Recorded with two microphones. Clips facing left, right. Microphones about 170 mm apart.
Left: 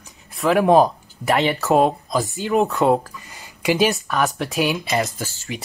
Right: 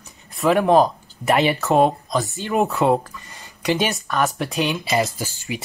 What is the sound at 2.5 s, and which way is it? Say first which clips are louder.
Speech: left 1 dB; centre (ahead or behind).